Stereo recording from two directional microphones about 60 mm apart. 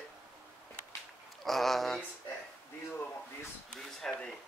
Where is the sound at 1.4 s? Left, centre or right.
Centre.